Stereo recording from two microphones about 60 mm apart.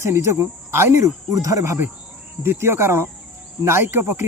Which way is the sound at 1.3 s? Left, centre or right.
Right.